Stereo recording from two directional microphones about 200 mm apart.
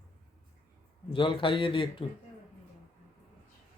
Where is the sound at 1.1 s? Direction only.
25° left (ahead or behind).